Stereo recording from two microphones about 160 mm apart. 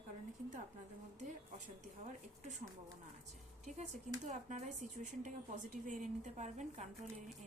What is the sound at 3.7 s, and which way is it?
Speech, 50° right (ahead or behind).